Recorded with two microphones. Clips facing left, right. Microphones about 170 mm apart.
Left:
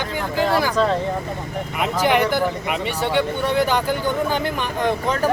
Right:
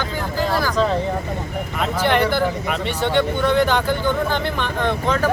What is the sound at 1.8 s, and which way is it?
Speech, 10° left (ahead or behind).